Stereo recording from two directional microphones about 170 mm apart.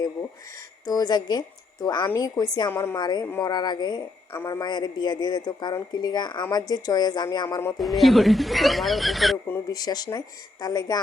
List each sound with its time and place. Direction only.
0.9 s a woman's voice: 20° left (ahead or behind)
7.8 s speech: centre (ahead or behind)
9.5 s a woman's voice: 20° left (ahead or behind)